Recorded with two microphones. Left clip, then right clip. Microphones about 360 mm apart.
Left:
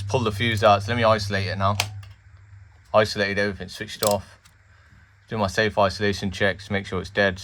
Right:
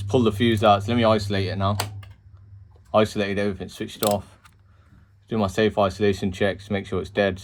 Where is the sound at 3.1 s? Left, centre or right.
Left.